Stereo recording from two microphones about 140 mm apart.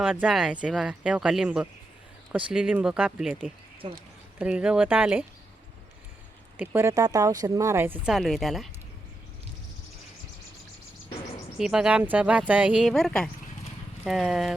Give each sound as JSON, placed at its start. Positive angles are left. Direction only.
{"t": 0.0, "sound": "speech", "side_deg": -10}
{"t": 3.8, "sound": "speech", "side_deg": -40}
{"t": 4.4, "sound": "speech", "side_deg": -10}
{"t": 6.6, "sound": "speech", "side_deg": -20}
{"t": 8.1, "sound": "a woman's voice", "side_deg": 0}
{"t": 11.5, "sound": "speech", "side_deg": -5}
{"t": 12.9, "sound": "a woman's voice", "side_deg": 5}